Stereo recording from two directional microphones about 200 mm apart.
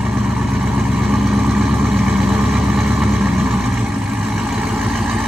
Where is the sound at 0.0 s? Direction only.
Centre (ahead or behind).